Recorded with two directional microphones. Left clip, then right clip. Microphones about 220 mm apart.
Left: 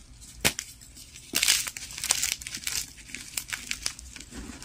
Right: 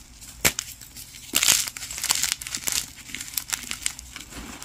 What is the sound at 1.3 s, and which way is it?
Crumpling, 15° right (ahead or behind).